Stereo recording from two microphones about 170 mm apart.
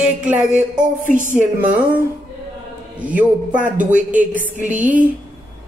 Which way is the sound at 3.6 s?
50° right (ahead or behind).